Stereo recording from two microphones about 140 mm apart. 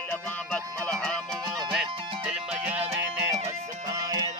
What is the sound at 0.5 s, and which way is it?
Music, 5° left (ahead or behind).